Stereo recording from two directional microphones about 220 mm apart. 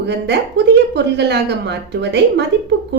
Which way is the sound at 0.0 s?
50° right (ahead or behind).